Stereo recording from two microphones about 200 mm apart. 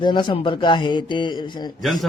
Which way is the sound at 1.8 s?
Centre (ahead or behind).